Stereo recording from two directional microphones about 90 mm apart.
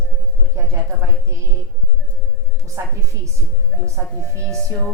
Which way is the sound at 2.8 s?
30° right (ahead or behind).